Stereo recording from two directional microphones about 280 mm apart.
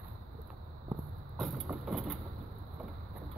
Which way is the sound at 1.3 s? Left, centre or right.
Centre.